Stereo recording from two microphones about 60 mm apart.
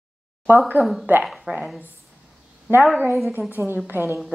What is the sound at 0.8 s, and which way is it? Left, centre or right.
Speech, right.